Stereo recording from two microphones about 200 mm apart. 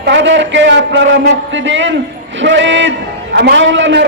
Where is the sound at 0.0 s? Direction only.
65° right (ahead or behind).